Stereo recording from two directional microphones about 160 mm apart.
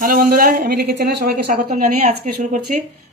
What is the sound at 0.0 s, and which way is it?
Speech, 65° right (ahead or behind).